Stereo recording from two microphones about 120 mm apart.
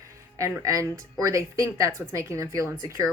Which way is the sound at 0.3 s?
25° right (ahead or behind).